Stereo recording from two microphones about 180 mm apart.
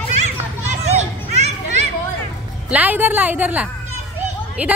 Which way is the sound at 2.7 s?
10° right (ahead or behind).